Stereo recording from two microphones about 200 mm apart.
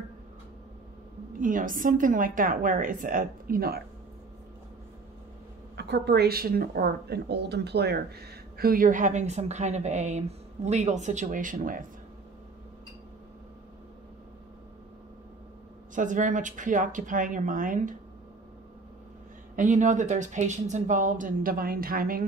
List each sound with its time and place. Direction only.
1.4 s a woman's voice: 40° right (ahead or behind)
5.8 s a woman's voice: 55° right (ahead or behind)
15.9 s speech: 40° right (ahead or behind)
19.5 s speech: 40° right (ahead or behind)